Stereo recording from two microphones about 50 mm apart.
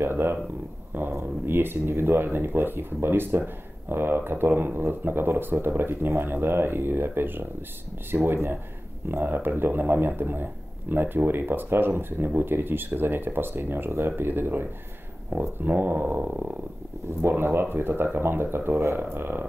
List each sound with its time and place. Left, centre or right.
0.0 s speech: right
1.4 s speech: right
9.1 s speech: right
17.2 s speech: right